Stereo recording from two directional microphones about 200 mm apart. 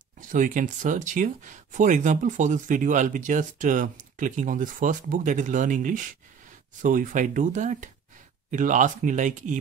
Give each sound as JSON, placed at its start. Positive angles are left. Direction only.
{"t": 0.2, "sound": "speech", "side_deg": -40}